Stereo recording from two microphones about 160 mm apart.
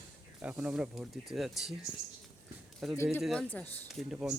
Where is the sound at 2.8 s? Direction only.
Centre (ahead or behind).